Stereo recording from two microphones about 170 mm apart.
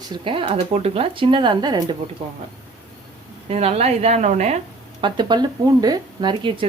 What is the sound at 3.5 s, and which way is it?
A woman's voice, 40° right (ahead or behind).